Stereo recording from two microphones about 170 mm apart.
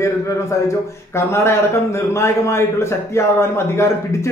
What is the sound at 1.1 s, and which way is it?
A man's voice, 15° left (ahead or behind).